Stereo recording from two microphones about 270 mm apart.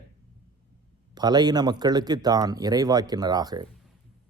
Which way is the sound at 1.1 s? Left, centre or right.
Centre.